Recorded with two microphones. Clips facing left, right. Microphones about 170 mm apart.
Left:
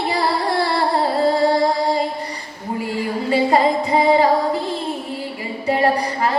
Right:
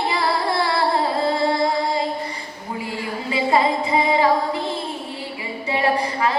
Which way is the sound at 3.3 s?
40° left (ahead or behind).